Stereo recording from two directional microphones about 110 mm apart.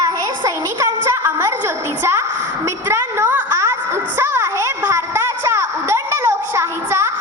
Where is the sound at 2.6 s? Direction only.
20° right (ahead or behind).